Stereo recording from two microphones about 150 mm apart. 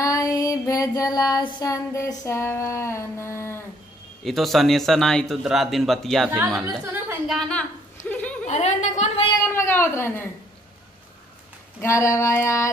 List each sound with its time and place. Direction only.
0.0 s female singing: 20° left (ahead or behind)
4.2 s speech: centre (ahead or behind)
8.1 s a sound: 10° left (ahead or behind)
8.5 s a woman's voice: 50° left (ahead or behind)
9.4 s a woman's voice: 15° left (ahead or behind)
11.8 s female singing: 20° left (ahead or behind)